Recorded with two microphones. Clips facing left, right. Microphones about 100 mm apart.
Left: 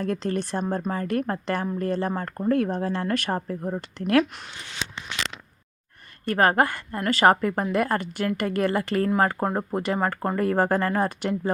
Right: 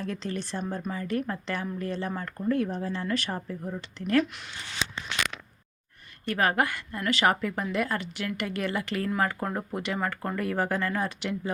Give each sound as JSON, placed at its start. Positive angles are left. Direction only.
{"t": 0.0, "sound": "speech", "side_deg": 50}
{"t": 6.2, "sound": "speech", "side_deg": 40}